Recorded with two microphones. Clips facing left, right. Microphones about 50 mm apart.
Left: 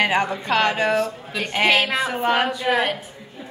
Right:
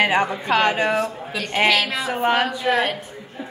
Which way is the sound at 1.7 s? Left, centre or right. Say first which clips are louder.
Left 1 dB; left.